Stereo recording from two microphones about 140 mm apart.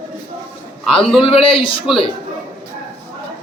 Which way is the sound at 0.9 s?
40° left (ahead or behind).